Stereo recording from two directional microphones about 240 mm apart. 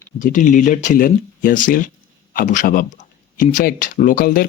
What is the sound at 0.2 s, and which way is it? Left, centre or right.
Speech, left.